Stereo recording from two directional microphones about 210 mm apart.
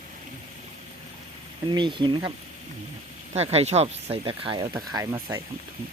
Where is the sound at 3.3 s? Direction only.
30° right (ahead or behind).